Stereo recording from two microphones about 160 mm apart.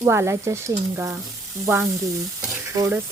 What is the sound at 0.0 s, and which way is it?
Speech, 15° right (ahead or behind).